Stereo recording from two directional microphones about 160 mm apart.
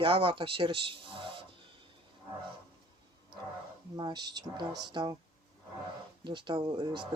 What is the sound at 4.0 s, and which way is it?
Speech, 25° right (ahead or behind).